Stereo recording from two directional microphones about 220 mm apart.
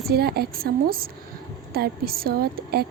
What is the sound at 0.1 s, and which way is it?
A woman's voice, 45° right (ahead or behind).